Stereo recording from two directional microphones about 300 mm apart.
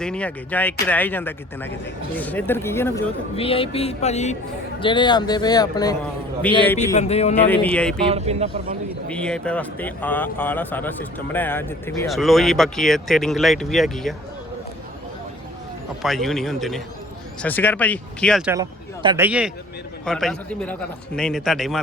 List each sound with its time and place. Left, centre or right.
0.0 s speech: centre
3.3 s speech: centre
6.9 s speech: left
7.4 s speech: centre
8.0 s speech: right
9.0 s speech: centre
16.0 s speech: centre
18.5 s a man's voice: centre